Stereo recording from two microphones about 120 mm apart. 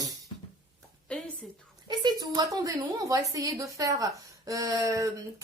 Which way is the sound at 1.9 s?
35° right (ahead or behind).